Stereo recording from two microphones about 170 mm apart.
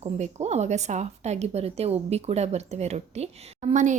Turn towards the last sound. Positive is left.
turn(degrees=-45)  # may be behind; listen again after turning